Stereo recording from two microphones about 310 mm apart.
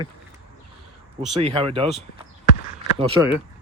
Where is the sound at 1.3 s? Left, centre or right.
Centre.